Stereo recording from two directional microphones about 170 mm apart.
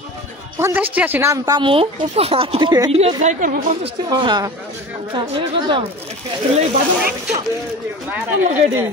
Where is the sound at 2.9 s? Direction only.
35° right (ahead or behind).